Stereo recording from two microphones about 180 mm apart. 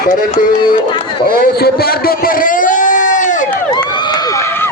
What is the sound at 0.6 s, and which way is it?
Speech, 25° left (ahead or behind).